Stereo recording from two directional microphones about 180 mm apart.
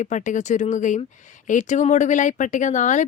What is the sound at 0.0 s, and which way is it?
Speech, 45° left (ahead or behind).